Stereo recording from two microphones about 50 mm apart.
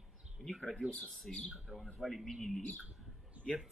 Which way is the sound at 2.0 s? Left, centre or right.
Centre.